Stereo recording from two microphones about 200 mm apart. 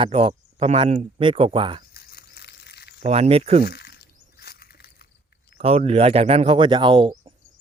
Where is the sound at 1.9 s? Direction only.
50° left (ahead or behind).